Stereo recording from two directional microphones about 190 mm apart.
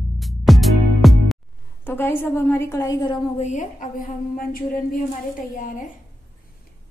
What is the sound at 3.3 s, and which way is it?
A woman's voice, 40° left (ahead or behind).